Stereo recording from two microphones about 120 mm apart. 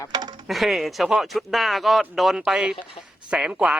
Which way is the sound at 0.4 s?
Centre (ahead or behind).